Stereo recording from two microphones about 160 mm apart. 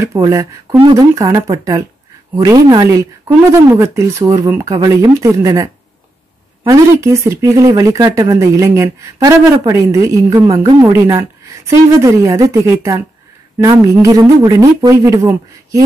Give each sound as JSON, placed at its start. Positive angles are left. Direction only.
{"t": 0.0, "sound": "speech", "side_deg": -20}